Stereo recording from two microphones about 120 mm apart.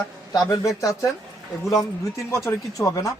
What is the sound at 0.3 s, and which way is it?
Speech, 30° left (ahead or behind).